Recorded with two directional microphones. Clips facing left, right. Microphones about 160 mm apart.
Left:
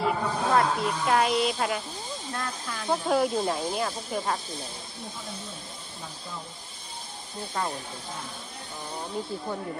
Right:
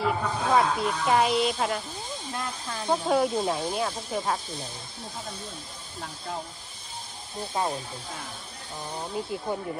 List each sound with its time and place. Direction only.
0.0 s speech: centre (ahead or behind)
2.3 s speech: 20° right (ahead or behind)
2.9 s speech: centre (ahead or behind)
7.6 s speech: 20° right (ahead or behind)
9.2 s speech: 5° right (ahead or behind)